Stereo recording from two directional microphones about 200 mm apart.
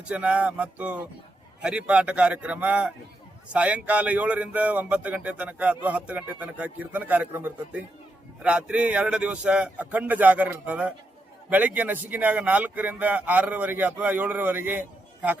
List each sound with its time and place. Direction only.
0.0 s speech: 5° right (ahead or behind)